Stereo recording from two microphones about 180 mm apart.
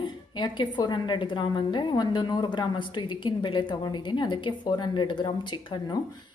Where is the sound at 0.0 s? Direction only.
25° left (ahead or behind).